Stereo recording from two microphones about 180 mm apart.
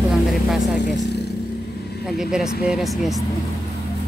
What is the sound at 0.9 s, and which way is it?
Vehicle, 70° left (ahead or behind).